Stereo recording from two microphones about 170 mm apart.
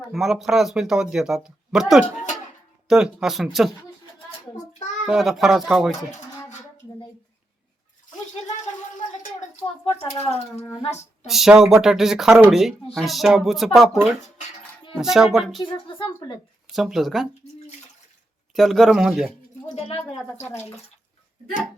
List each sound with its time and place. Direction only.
0.1 s speech: centre (ahead or behind)
5.0 s speech: centre (ahead or behind)
9.8 s speech: 35° left (ahead or behind)
11.3 s speech: centre (ahead or behind)
16.7 s speech: centre (ahead or behind)
18.5 s speech: centre (ahead or behind)
19.6 s speech: 35° left (ahead or behind)